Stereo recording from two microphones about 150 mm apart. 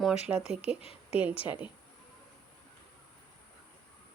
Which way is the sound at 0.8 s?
45° left (ahead or behind).